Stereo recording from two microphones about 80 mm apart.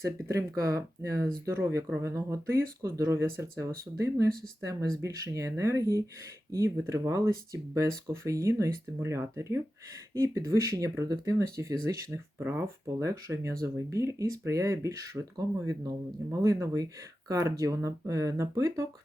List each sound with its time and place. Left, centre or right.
0.0 s speech: right